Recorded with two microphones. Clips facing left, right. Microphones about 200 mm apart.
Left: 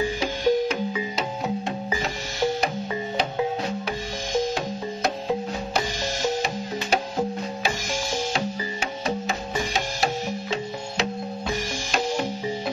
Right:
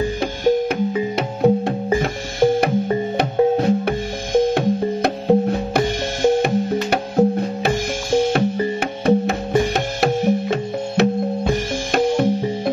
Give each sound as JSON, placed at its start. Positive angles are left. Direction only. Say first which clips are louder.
{"t": 0.2, "sound": "music", "louder": "right 4 dB", "side_deg": -55}